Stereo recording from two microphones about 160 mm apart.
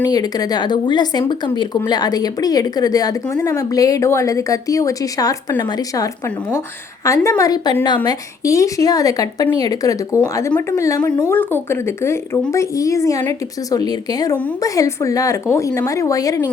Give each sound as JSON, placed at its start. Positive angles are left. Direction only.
{"t": 0.1, "sound": "speech", "side_deg": 25}